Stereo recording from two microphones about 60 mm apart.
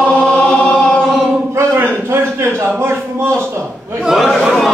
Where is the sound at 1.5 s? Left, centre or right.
Right.